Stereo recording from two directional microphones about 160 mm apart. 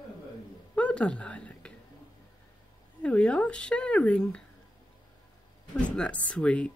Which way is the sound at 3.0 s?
5° left (ahead or behind).